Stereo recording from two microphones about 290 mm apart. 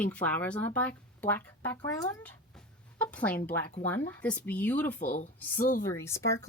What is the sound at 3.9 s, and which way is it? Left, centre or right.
Speech, centre.